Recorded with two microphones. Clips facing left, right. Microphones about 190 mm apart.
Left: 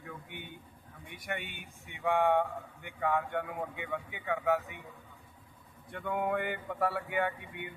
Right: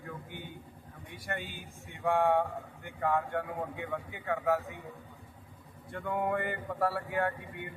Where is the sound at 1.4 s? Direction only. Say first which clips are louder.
Right 2 dB; 70° left (ahead or behind).